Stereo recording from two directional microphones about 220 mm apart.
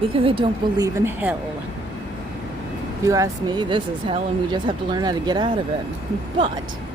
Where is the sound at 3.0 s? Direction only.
15° right (ahead or behind).